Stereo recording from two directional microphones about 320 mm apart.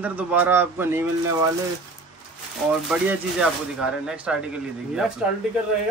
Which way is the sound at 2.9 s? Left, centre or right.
Centre.